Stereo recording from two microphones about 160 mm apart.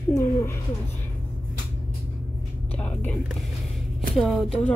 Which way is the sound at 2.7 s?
10° left (ahead or behind).